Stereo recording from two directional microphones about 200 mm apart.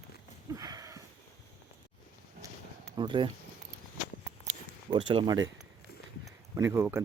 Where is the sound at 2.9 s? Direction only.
25° right (ahead or behind).